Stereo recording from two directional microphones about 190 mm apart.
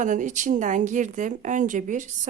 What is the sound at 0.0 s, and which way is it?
A woman's voice, 40° right (ahead or behind).